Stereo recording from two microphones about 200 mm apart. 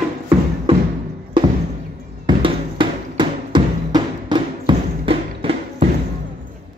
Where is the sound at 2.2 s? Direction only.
25° right (ahead or behind).